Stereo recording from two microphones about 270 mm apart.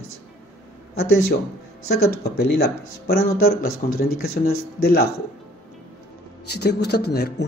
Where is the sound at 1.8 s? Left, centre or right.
Left.